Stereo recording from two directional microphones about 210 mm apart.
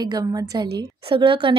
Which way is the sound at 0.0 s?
20° right (ahead or behind).